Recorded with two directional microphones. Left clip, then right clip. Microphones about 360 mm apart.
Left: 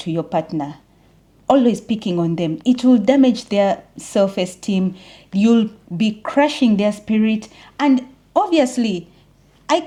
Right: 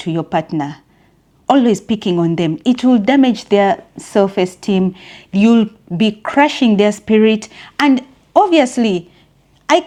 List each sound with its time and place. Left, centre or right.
0.0 s a woman's voice: centre